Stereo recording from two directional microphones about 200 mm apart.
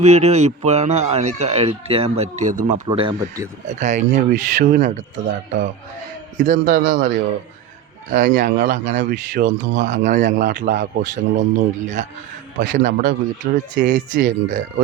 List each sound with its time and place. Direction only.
0.0 s speech: 35° right (ahead or behind)
2.8 s speech: 25° right (ahead or behind)
3.7 s speech: 35° right (ahead or behind)
9.4 s speech: 65° right (ahead or behind)
9.8 s speech: 35° right (ahead or behind)
12.5 s speech: 40° right (ahead or behind)